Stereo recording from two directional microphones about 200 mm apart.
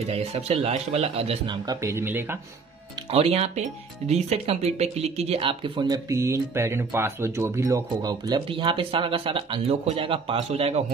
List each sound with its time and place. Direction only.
0.0 s speech: 30° right (ahead or behind)
1.7 s speech: 15° right (ahead or behind)
3.1 s speech: 30° right (ahead or behind)